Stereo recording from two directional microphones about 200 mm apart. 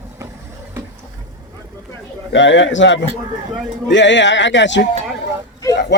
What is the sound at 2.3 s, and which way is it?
Speech, 65° left (ahead or behind).